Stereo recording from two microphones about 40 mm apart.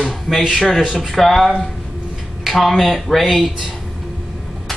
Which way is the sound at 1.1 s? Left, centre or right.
Centre.